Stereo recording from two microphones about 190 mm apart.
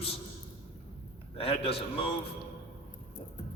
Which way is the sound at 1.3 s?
30° left (ahead or behind).